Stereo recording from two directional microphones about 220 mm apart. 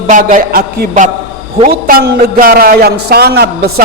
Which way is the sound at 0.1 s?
35° right (ahead or behind).